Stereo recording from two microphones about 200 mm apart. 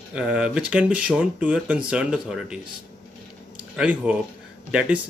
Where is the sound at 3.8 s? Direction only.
5° right (ahead or behind).